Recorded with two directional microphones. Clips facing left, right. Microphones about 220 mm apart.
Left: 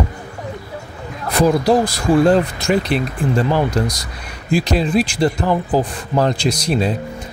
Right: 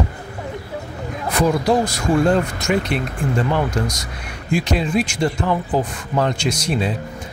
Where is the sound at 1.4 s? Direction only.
35° left (ahead or behind).